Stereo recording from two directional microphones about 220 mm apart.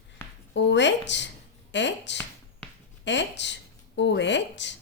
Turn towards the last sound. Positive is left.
turn(degrees=55)  # may be behind; listen again after turning